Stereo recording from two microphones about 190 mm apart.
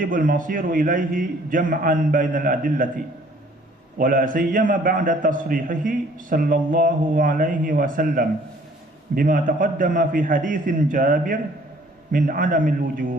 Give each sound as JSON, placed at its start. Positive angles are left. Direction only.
{"t": 0.0, "sound": "a man's voice", "side_deg": -45}
{"t": 3.9, "sound": "a man's voice", "side_deg": -45}